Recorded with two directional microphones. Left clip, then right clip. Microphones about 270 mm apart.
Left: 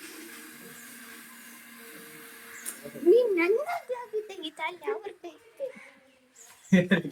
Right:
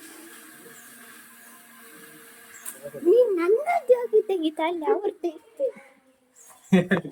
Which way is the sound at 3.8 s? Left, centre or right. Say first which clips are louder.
Right 14 dB; right.